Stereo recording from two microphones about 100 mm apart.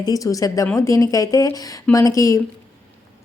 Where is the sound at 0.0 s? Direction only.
35° left (ahead or behind).